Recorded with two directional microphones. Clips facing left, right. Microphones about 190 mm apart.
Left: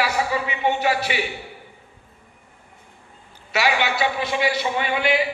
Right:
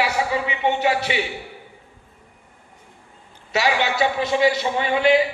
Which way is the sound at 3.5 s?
30° right (ahead or behind).